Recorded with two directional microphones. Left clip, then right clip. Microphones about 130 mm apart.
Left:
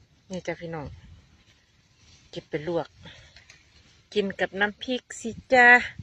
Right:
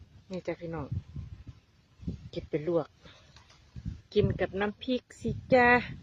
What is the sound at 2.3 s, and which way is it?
Speech, 15° right (ahead or behind).